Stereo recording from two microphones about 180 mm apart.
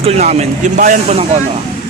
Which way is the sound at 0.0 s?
35° right (ahead or behind).